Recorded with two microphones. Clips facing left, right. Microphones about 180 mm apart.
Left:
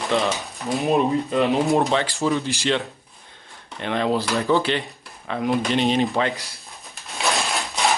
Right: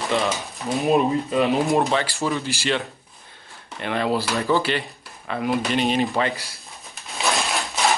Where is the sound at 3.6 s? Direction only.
5° right (ahead or behind).